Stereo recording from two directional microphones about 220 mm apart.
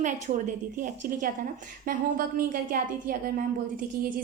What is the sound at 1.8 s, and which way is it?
A woman's voice, 40° right (ahead or behind).